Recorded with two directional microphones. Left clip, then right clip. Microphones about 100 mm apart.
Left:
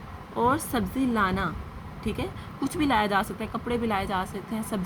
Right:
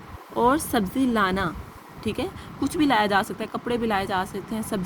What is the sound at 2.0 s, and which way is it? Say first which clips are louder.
A woman's voice: right 4 dB; 50° right (ahead or behind).